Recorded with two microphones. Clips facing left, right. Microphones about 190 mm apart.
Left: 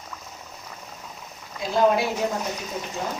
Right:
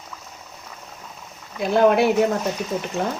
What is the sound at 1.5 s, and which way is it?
Speech, 60° right (ahead or behind).